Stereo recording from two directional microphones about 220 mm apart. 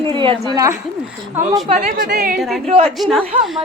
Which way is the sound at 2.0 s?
40° right (ahead or behind).